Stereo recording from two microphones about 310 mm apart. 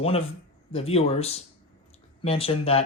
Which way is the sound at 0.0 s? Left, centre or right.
Centre.